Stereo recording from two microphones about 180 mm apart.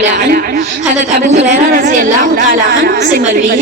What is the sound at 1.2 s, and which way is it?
A woman's voice, 40° right (ahead or behind).